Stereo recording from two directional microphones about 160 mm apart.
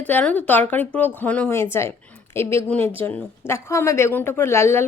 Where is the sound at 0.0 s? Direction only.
10° left (ahead or behind).